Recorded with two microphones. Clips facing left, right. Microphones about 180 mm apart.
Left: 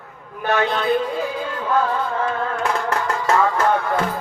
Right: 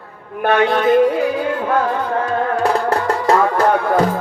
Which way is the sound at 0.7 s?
70° right (ahead or behind).